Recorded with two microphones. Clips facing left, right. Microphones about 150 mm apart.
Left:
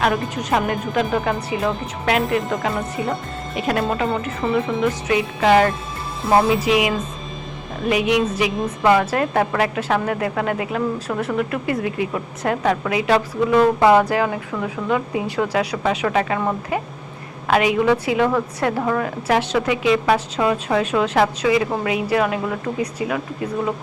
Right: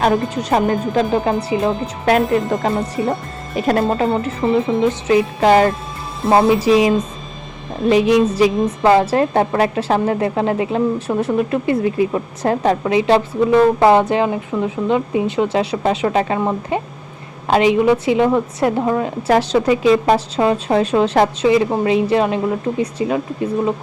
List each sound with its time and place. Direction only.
0.0 s a woman's voice: 35° right (ahead or behind)
19.3 s a woman's voice: 35° right (ahead or behind)